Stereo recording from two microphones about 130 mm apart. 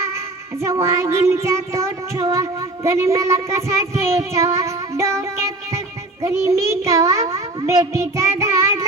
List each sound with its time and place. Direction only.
0.6 s child singing: 20° right (ahead or behind)
6.2 s a child's voice: 20° right (ahead or behind)